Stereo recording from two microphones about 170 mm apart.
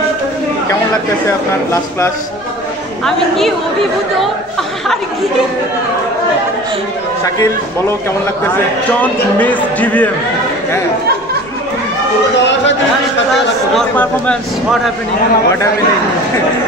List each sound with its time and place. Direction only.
1.2 s a man's voice: 15° left (ahead or behind)
3.1 s a man's voice: centre (ahead or behind)
9.0 s a man's voice: 10° left (ahead or behind)
13.7 s a man's voice: 5° left (ahead or behind)